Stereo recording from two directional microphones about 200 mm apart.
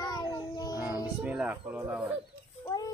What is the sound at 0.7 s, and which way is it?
Music, 10° right (ahead or behind).